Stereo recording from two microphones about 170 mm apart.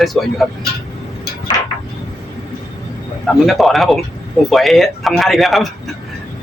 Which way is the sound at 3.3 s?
Centre (ahead or behind).